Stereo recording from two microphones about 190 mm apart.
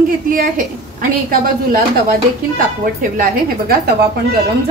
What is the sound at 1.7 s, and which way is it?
A woman's voice, 50° right (ahead or behind).